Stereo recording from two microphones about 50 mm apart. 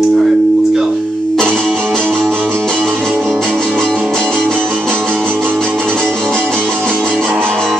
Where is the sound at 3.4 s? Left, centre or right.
Centre.